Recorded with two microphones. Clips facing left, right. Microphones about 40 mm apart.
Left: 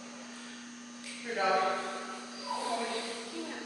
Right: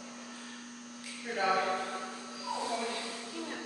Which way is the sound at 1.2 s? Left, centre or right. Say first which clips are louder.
Left 1 dB; centre.